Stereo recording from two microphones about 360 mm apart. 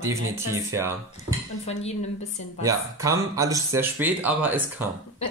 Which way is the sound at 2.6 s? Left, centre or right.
Centre.